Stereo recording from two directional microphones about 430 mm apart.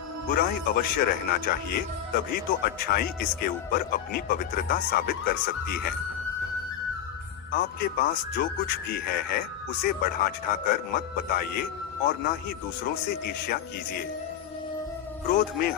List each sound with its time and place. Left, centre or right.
0.3 s speech: centre
7.5 s speech: centre
15.4 s speech: left